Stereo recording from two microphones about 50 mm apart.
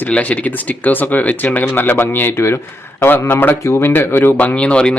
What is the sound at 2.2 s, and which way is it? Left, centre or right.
Speech, left.